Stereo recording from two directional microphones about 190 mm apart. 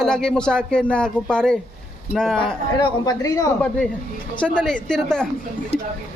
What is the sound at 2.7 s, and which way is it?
Speech, 20° left (ahead or behind).